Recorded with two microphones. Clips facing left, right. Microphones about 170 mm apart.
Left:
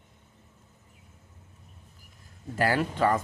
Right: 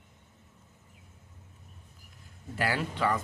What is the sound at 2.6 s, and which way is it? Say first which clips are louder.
Speech: left 5 dB; 45° left (ahead or behind).